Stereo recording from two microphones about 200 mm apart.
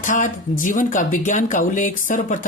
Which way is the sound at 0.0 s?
40° left (ahead or behind).